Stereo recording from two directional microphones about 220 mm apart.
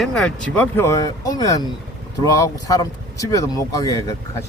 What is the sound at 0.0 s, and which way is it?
Speech, 5° left (ahead or behind).